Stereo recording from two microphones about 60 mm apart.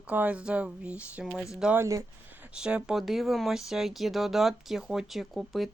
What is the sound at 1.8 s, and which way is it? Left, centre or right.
Speech, right.